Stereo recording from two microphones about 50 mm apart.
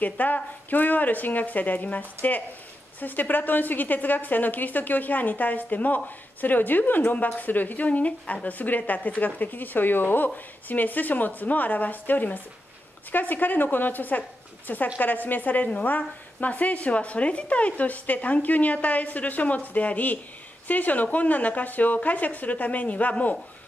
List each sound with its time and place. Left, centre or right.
0.0 s a woman's voice: left